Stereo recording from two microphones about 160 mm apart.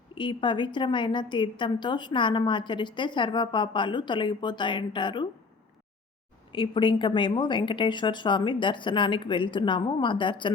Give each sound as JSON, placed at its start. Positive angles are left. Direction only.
{"t": 0.1, "sound": "a woman's voice", "side_deg": 30}
{"t": 6.5, "sound": "speech", "side_deg": 30}